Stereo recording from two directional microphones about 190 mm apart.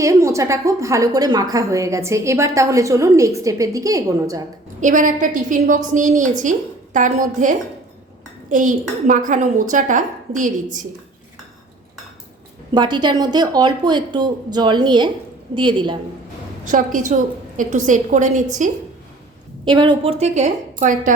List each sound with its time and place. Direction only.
0.0 s a woman's voice: 15° right (ahead or behind)
4.8 s a woman's voice: 45° right (ahead or behind)
12.7 s a woman's voice: 25° right (ahead or behind)
16.6 s a woman's voice: 45° right (ahead or behind)
19.6 s a woman's voice: 25° right (ahead or behind); by 21.1 s 40° right (ahead or behind)